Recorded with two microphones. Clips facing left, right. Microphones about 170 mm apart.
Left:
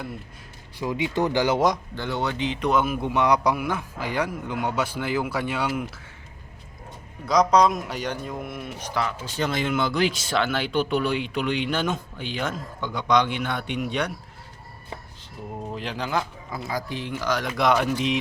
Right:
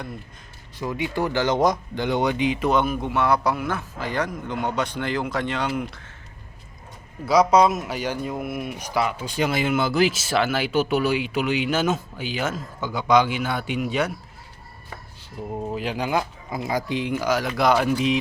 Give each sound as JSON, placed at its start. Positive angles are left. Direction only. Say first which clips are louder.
{"t": 0.8, "sound": "speech", "louder": "left 1 dB", "side_deg": 15}
{"t": 1.5, "sound": "a man's voice", "louder": "right 1 dB", "side_deg": 0}
{"t": 2.0, "sound": "speech", "louder": "right 5 dB", "side_deg": -15}
{"t": 3.1, "sound": "speech", "louder": "left 2 dB", "side_deg": 15}
{"t": 7.3, "sound": "a man's voice", "louder": "right 2 dB", "side_deg": -5}
{"t": 15.7, "sound": "speech", "louder": "right 3 dB", "side_deg": -10}